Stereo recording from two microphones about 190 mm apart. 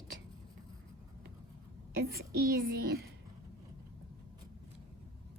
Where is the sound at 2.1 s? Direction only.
55° right (ahead or behind).